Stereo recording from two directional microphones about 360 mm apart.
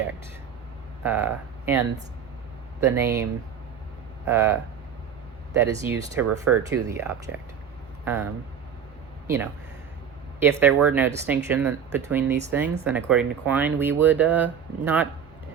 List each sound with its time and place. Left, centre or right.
1.0 s speech: centre
2.8 s speech: centre
4.3 s speech: centre
5.5 s speech: centre
6.2 s speech: right
6.6 s speech: centre
10.4 s speech: centre